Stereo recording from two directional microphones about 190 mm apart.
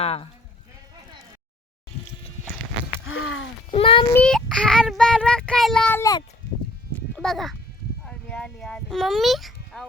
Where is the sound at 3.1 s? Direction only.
90° left.